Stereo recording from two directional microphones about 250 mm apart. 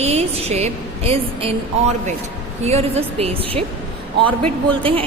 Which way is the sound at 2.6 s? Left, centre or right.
Right.